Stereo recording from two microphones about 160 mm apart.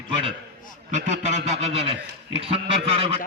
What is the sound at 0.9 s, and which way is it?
A man's voice, 45° right (ahead or behind).